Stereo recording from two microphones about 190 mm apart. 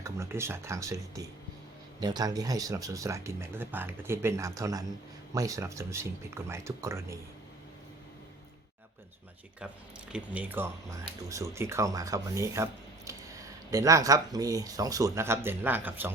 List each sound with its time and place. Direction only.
0.0 s speech: 15° right (ahead or behind)
10.1 s speech: 5° right (ahead or behind)